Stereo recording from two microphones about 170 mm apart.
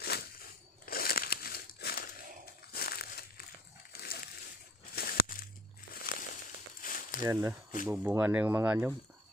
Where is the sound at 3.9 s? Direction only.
65° left (ahead or behind).